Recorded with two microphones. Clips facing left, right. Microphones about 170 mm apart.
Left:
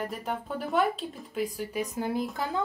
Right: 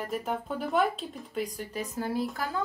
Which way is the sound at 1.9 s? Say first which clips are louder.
Right 2 dB; 20° left (ahead or behind).